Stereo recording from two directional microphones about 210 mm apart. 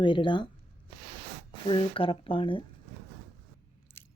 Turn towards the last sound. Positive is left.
turn(degrees=10)  # may be behind; listen again after turning